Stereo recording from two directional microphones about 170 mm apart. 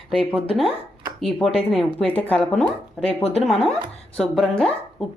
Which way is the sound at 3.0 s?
35° left (ahead or behind).